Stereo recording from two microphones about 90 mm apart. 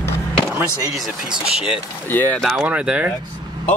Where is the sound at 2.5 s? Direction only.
10° right (ahead or behind).